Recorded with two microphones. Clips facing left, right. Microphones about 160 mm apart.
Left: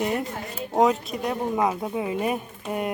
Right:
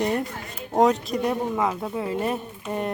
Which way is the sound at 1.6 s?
15° left (ahead or behind).